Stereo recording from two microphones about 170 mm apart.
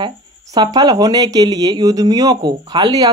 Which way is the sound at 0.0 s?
20° right (ahead or behind).